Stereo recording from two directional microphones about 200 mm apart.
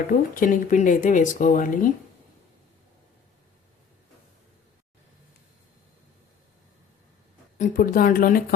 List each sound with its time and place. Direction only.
0.1 s speech: 40° left (ahead or behind)
7.6 s speech: 40° left (ahead or behind)